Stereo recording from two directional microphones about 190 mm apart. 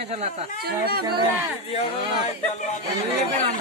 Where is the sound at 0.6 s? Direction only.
55° right (ahead or behind).